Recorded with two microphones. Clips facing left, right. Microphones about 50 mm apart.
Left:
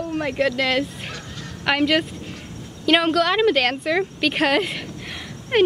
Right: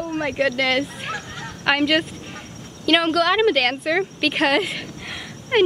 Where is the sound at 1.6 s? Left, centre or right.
Centre.